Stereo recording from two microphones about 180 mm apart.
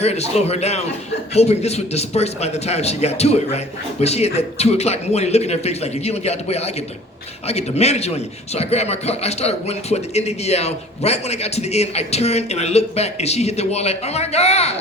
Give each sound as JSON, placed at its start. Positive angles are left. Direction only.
{"t": 0.0, "sound": "a man's voice", "side_deg": 35}